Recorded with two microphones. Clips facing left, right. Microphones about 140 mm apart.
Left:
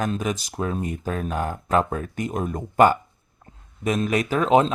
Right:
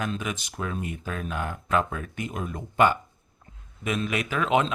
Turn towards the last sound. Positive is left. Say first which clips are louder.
# left 6 dB
turn(degrees=35)  # may be behind; listen again after turning